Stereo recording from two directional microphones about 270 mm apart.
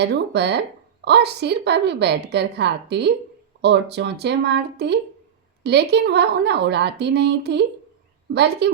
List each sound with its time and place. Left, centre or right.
0.0 s a woman's voice: right